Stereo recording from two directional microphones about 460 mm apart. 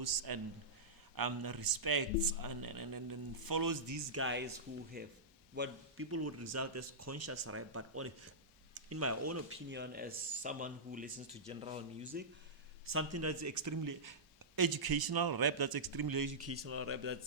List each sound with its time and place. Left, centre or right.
0.3 s a man's voice: right; by 12.2 s centre
12.8 s speech: right
16.6 s speech: right